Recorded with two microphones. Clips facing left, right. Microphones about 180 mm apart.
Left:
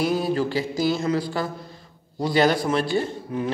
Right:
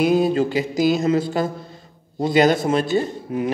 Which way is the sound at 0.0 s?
20° right (ahead or behind).